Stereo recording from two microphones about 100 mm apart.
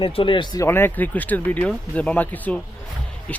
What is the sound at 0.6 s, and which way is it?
Speech, 25° left (ahead or behind).